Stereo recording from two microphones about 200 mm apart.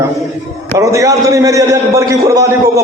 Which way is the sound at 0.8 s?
15° right (ahead or behind).